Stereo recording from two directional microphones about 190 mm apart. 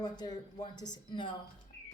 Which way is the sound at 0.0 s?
20° left (ahead or behind).